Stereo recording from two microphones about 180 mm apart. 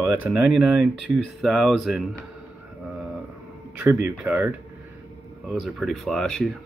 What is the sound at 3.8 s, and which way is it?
A man's voice, 15° right (ahead or behind).